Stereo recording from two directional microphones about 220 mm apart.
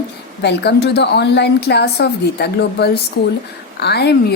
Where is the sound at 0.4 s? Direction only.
50° left (ahead or behind).